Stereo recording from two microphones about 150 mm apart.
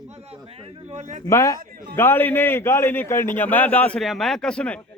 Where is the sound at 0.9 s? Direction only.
50° right (ahead or behind).